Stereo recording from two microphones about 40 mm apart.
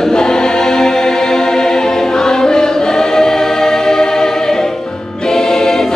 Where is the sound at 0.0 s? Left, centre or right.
Centre.